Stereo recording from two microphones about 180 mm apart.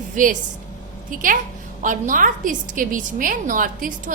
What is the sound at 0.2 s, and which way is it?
A woman's voice, 45° right (ahead or behind).